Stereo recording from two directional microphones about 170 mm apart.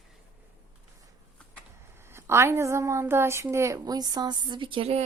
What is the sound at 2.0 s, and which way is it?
A woman's voice, 15° right (ahead or behind).